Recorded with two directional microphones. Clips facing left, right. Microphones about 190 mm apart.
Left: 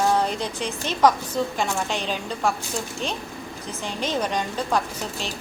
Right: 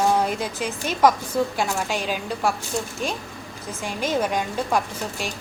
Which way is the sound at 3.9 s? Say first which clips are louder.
Right 2 dB; 10° right (ahead or behind).